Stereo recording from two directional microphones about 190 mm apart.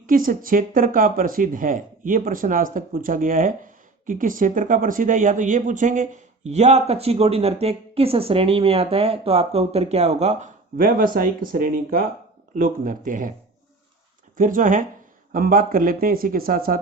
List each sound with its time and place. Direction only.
0.1 s speech: 45° right (ahead or behind)
10.8 s speech: 50° right (ahead or behind)
14.3 s speech: 45° right (ahead or behind)